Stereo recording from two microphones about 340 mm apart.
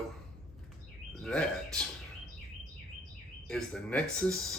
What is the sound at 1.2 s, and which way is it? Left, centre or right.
Speech, centre.